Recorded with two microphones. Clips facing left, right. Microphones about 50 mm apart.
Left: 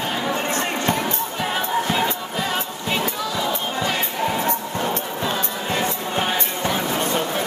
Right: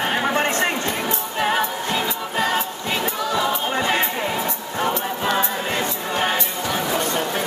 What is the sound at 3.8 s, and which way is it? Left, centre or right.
Music, right.